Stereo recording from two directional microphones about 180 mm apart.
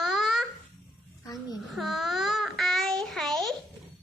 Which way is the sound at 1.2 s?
20° left (ahead or behind).